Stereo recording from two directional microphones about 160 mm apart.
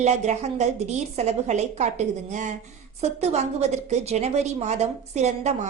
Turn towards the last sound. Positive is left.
turn(degrees=-45)  # may be behind; listen again after turning